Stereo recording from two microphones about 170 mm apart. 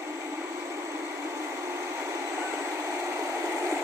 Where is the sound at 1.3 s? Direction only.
15° right (ahead or behind).